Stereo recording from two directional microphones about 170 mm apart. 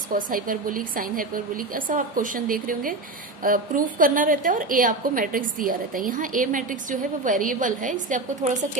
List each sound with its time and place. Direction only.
0.1 s a woman's voice: 55° right (ahead or behind)